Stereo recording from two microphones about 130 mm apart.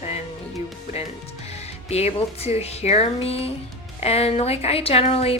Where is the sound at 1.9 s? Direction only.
55° left (ahead or behind).